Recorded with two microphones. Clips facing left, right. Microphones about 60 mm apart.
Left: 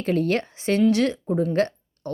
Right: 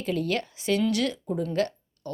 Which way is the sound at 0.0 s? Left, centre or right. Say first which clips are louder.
Left 5 dB; left.